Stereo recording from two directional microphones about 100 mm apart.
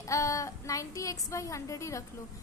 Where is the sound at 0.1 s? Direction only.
35° left (ahead or behind).